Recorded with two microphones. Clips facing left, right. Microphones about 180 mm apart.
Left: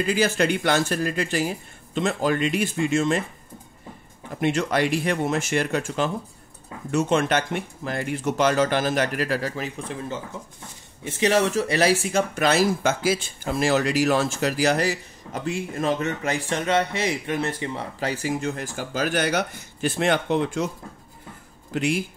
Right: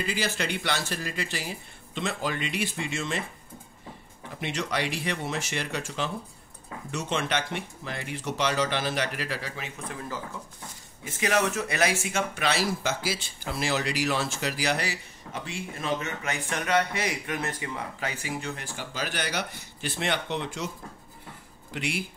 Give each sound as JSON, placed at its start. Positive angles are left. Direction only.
{"t": 0.0, "sound": "speech", "side_deg": 50}
{"t": 4.4, "sound": "speech", "side_deg": 50}
{"t": 9.8, "sound": "speech", "side_deg": 25}
{"t": 21.7, "sound": "speech", "side_deg": 45}